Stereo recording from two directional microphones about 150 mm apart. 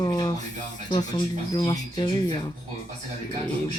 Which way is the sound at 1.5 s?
25° left (ahead or behind).